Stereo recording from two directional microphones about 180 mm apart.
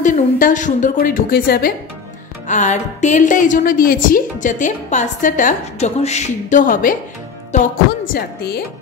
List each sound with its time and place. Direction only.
0.0 s speech: 45° left (ahead or behind)
2.4 s speech: 40° left (ahead or behind)
8.1 s a woman's voice: 65° left (ahead or behind)